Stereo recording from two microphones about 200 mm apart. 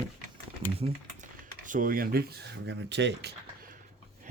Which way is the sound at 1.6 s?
45° right (ahead or behind).